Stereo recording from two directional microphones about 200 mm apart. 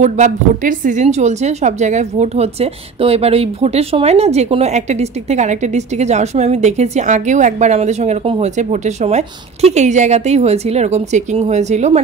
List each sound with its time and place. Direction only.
0.0 s a woman's voice: 40° right (ahead or behind)